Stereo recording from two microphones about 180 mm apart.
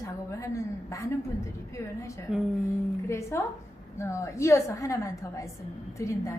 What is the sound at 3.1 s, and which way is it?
A woman's voice, 15° left (ahead or behind).